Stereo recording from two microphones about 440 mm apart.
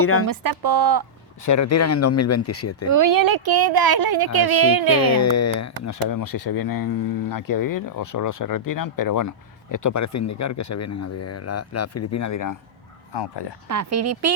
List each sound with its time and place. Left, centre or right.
0.0 s speech: left
0.3 s speech: right
1.5 s speech: left
2.9 s speech: right
5.0 s speech: left
13.1 s speech: left
13.7 s speech: right